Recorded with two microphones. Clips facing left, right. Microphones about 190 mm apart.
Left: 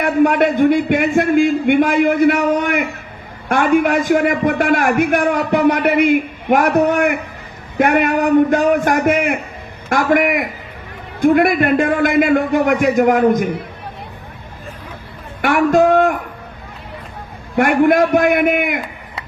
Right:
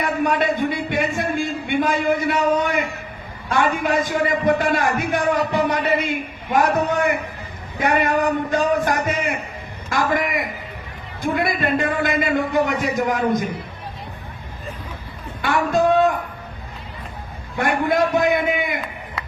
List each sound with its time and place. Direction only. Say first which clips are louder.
0.0 s a man's voice: left 7 dB; 60° left (ahead or behind)
15.4 s a man's voice: left 6 dB; 55° left (ahead or behind)
17.6 s a man's voice: left 7 dB; 60° left (ahead or behind)